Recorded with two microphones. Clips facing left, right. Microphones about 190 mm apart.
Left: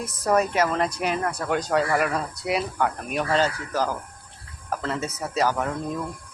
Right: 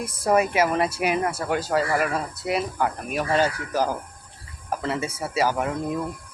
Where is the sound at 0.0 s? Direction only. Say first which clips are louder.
Right 1 dB; 10° right (ahead or behind).